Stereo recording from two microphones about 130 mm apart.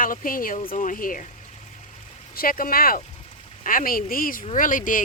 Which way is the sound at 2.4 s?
90° left.